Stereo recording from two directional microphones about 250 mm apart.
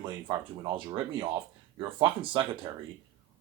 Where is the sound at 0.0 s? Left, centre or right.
Centre.